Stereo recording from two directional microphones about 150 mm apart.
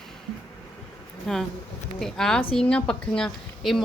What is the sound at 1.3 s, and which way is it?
A woman's voice, centre (ahead or behind).